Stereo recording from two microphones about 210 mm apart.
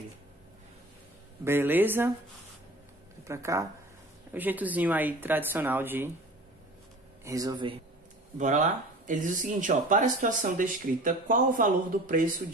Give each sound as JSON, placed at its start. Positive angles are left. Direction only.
{"t": 1.4, "sound": "speech", "side_deg": -10}
{"t": 3.3, "sound": "speech", "side_deg": -15}
{"t": 7.2, "sound": "speech", "side_deg": -15}
{"t": 8.4, "sound": "speech", "side_deg": -35}